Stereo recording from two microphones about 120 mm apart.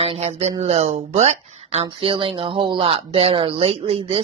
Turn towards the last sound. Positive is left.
turn(degrees=-55)  # may be behind; listen again after turning